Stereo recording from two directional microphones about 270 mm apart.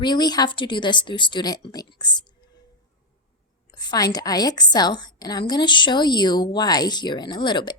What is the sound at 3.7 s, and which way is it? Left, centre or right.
Speech, centre.